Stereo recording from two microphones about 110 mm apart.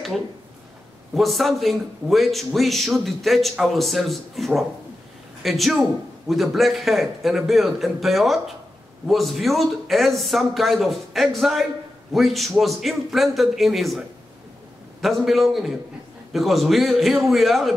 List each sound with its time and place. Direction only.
1.1 s a man's voice: centre (ahead or behind)